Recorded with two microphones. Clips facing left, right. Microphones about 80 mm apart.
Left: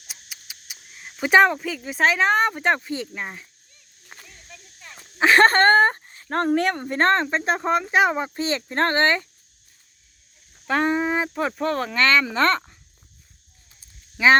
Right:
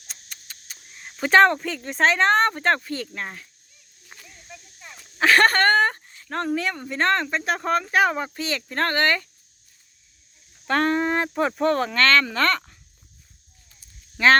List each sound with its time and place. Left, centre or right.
0.1 s speech: centre
4.1 s a sound: left
4.4 s a sound: centre
5.2 s a sound: left
6.6 s speech: left
6.8 s speech: left
7.6 s speech: centre
10.7 s speech: centre
11.9 s speech: centre
14.2 s speech: centre